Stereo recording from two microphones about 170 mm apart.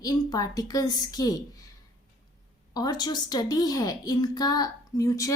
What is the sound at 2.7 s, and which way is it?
Speech, 25° left (ahead or behind).